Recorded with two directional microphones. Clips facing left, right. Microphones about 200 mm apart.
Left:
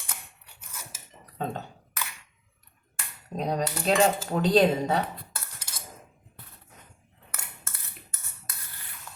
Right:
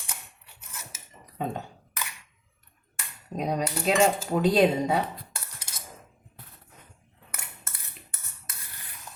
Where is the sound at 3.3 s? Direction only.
10° right (ahead or behind).